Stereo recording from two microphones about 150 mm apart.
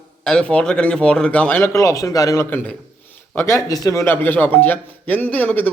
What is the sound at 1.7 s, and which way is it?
A man's voice, 20° left (ahead or behind).